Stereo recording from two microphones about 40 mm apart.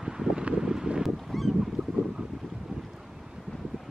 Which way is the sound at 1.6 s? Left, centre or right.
Centre.